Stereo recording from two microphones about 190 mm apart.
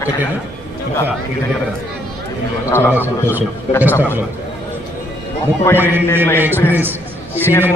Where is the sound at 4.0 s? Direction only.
10° right (ahead or behind).